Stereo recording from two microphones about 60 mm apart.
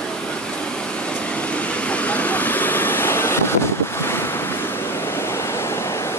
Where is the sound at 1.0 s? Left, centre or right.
Centre.